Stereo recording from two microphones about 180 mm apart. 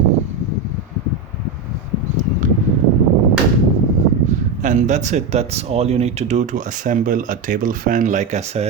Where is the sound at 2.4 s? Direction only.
45° right (ahead or behind).